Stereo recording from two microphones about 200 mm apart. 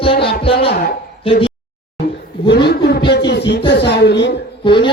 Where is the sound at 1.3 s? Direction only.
25° left (ahead or behind).